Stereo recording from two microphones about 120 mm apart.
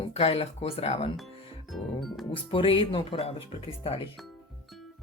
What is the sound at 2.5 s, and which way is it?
Speech, 45° left (ahead or behind).